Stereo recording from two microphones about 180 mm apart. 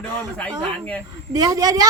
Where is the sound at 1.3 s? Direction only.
20° right (ahead or behind).